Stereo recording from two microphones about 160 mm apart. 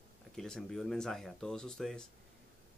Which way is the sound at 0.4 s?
5° left (ahead or behind).